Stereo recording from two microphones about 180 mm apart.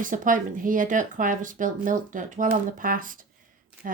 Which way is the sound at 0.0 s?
45° right (ahead or behind).